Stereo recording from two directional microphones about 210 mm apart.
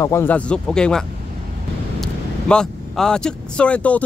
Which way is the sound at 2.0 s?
5° left (ahead or behind).